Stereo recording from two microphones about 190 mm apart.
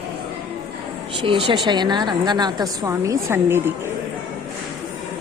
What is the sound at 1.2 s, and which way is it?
A woman's voice, 25° right (ahead or behind).